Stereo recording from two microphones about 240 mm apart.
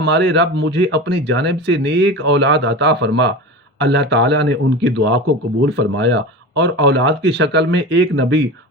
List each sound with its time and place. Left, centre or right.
0.0 s speech: right